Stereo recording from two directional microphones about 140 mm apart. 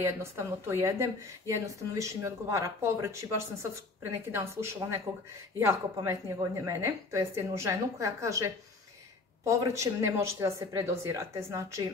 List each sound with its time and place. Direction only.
0.0 s a woman's voice: 20° right (ahead or behind)